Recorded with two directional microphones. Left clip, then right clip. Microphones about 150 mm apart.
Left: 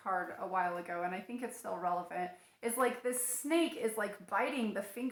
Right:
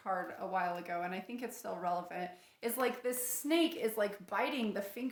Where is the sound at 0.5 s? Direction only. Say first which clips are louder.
Left 1 dB; 35° right (ahead or behind).